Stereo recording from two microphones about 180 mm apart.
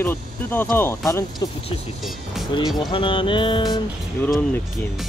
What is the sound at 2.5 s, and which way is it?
Speech, 25° left (ahead or behind).